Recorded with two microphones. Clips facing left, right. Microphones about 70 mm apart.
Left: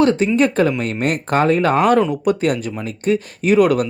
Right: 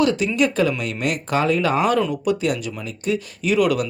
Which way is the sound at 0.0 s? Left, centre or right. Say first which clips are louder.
Left 4 dB; left.